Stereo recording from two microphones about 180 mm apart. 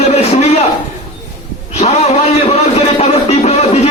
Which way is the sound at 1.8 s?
35° left (ahead or behind).